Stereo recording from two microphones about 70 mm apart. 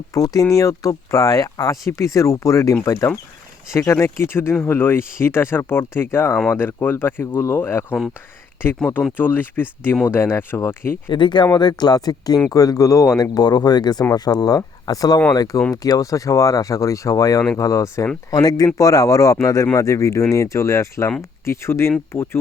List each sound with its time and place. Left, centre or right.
0.1 s speech: left
3.9 s speech: left
6.3 s speech: centre
6.6 s speech: left
9.1 s speech: left
10.1 s speech: left
11.1 s speech: left
13.3 s speech: left
18.3 s speech: left